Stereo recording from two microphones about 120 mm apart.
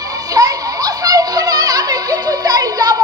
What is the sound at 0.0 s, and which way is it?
Music, 30° right (ahead or behind).